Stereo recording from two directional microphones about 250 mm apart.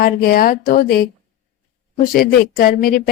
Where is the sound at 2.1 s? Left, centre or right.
Left.